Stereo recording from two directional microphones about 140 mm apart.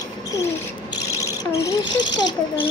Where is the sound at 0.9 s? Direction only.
20° left (ahead or behind).